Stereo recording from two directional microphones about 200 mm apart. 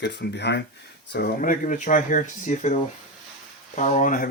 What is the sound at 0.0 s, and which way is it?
Speech, 55° left (ahead or behind).